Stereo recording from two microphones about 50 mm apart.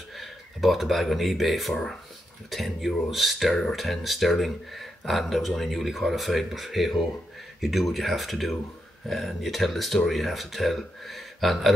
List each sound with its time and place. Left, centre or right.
0.1 s speech: centre